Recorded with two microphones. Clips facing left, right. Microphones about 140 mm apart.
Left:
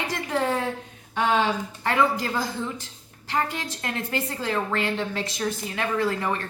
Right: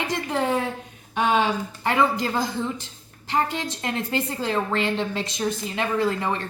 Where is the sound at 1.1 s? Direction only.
15° right (ahead or behind).